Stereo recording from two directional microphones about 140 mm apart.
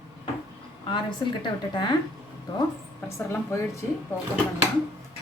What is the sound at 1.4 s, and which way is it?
Speech, 30° left (ahead or behind).